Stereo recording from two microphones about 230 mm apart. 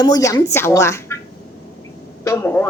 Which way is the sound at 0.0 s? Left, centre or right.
Centre.